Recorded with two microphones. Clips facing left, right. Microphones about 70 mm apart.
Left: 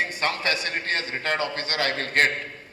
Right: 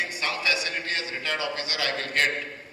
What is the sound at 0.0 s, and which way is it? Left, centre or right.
A man's voice, left.